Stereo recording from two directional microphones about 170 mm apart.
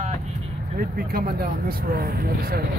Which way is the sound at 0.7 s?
65° right (ahead or behind).